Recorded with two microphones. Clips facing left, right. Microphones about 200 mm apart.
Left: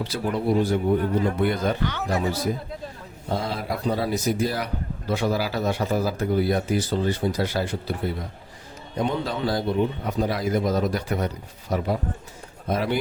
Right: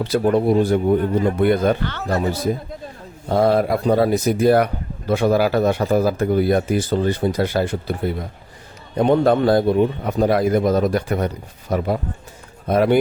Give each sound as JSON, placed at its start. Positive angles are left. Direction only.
{"t": 0.0, "sound": "speech", "side_deg": -55}
{"t": 1.8, "sound": "speech", "side_deg": 15}
{"t": 3.2, "sound": "speech", "side_deg": -60}